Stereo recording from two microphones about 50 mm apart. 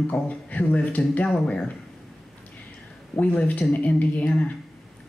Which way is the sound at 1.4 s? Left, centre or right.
Centre.